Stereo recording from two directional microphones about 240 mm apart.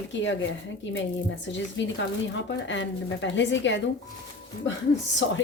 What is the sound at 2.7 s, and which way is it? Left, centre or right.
A woman's voice, left.